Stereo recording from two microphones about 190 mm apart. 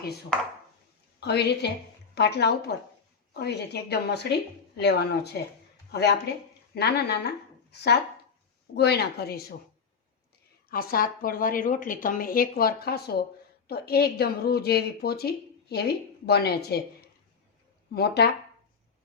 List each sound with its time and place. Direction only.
1.2 s a woman's voice: 60° left (ahead or behind)
8.7 s a woman's voice: 60° left (ahead or behind)
10.7 s a woman's voice: 50° left (ahead or behind)
17.9 s a woman's voice: 60° left (ahead or behind)